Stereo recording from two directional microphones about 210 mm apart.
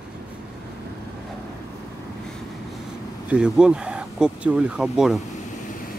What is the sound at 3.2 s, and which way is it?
Speech, 5° right (ahead or behind).